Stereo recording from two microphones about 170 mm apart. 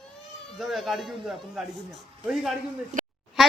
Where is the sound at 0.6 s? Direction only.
Centre (ahead or behind).